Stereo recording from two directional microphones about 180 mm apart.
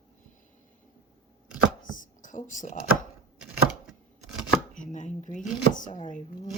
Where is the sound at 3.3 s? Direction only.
5° right (ahead or behind).